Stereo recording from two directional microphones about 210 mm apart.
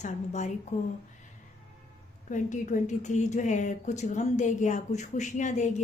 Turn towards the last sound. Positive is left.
turn(degrees=35)  # may be behind; listen again after turning